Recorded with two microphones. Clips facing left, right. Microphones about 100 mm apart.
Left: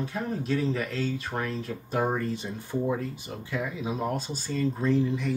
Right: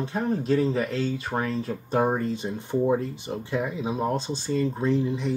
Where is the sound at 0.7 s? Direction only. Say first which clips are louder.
Right 3 dB; 25° right (ahead or behind).